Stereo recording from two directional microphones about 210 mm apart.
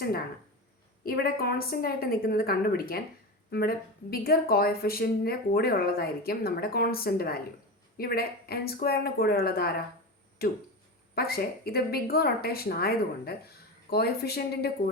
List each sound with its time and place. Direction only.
1.0 s speech: 45° left (ahead or behind)